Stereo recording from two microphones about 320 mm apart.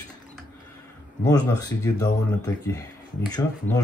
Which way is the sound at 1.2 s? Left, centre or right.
Centre.